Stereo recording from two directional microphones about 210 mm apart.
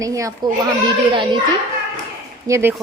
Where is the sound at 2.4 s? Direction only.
15° right (ahead or behind).